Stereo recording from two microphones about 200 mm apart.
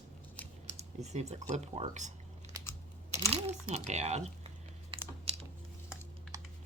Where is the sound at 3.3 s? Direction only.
30° right (ahead or behind).